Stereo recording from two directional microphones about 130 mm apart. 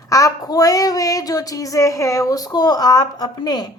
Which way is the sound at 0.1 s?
25° left (ahead or behind).